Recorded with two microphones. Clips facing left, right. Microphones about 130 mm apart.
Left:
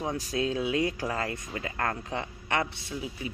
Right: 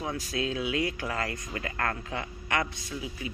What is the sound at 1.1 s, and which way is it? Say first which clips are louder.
A man's voice: left 1 dB; 15° left (ahead or behind).